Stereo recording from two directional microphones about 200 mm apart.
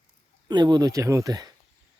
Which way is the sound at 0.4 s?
20° right (ahead or behind).